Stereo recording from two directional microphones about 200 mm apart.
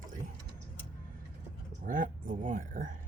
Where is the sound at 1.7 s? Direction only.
40° right (ahead or behind).